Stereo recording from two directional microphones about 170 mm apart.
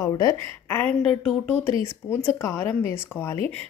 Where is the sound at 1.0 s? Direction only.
5° left (ahead or behind).